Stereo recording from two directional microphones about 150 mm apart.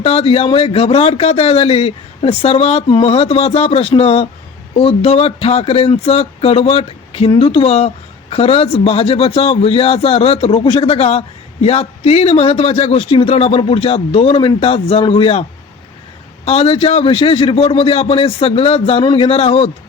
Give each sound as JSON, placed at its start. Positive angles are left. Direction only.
{"t": 0.0, "sound": "speech", "side_deg": 40}
{"t": 16.5, "sound": "speech", "side_deg": 40}